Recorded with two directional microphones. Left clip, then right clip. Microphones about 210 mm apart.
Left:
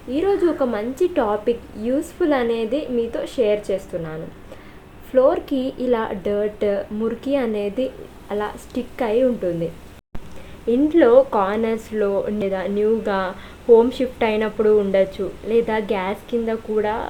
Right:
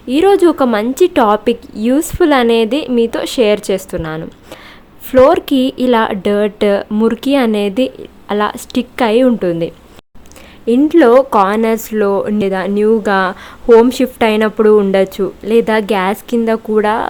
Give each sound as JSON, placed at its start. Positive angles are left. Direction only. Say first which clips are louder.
{"t": 0.1, "sound": "a woman's voice", "louder": "right 10 dB", "side_deg": -45}
{"t": 10.7, "sound": "a woman's voice", "louder": "right 6 dB", "side_deg": -35}